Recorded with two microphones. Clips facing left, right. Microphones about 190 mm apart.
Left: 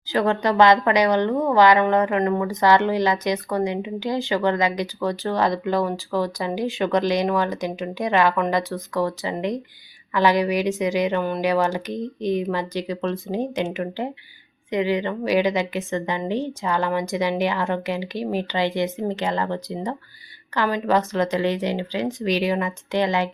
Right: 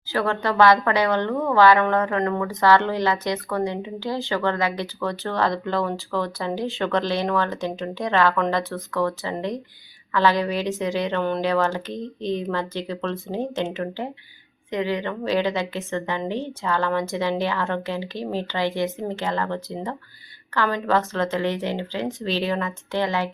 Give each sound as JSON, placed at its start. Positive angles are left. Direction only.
{"t": 0.1, "sound": "speech", "side_deg": 15}